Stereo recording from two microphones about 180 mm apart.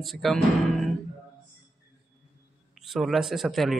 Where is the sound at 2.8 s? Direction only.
Centre (ahead or behind).